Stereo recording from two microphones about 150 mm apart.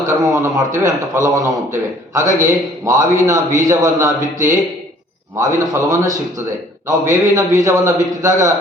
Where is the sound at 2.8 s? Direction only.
20° right (ahead or behind).